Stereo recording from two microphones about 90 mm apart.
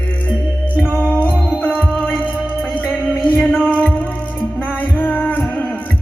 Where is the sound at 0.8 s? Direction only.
10° left (ahead or behind).